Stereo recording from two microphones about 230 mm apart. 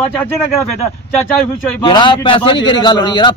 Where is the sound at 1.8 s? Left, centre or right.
Centre.